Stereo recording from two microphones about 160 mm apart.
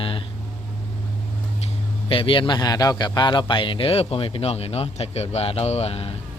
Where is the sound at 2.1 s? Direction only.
35° left (ahead or behind).